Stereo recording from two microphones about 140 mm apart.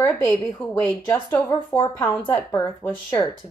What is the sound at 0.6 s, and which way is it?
Speech, 5° left (ahead or behind).